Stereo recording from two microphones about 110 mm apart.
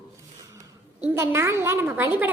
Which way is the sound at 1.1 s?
25° right (ahead or behind).